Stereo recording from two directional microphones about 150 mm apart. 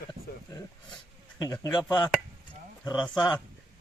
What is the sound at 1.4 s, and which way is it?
Speech, 25° left (ahead or behind).